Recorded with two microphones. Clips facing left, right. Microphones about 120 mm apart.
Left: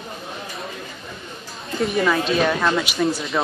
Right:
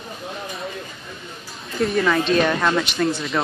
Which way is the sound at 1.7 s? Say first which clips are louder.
Right 1 dB; centre (ahead or behind).